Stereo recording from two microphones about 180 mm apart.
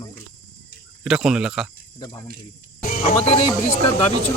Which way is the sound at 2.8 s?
50° left (ahead or behind).